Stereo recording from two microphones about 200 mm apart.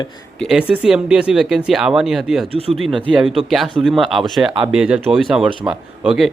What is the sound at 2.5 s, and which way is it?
Speech, 30° right (ahead or behind).